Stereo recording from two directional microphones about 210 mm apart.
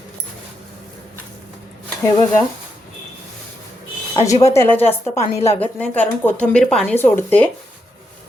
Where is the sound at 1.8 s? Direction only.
10° left (ahead or behind).